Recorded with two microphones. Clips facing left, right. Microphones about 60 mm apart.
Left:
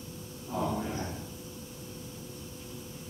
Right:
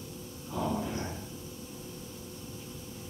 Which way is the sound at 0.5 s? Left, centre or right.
Left.